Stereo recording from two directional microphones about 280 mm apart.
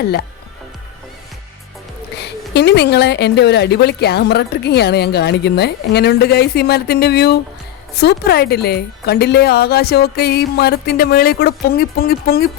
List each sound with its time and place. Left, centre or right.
2.2 s a woman's voice: left